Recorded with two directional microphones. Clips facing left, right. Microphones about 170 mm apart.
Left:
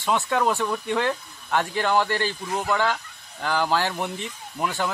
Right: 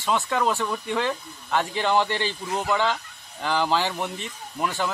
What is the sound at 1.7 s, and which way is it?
Speech, 15° right (ahead or behind).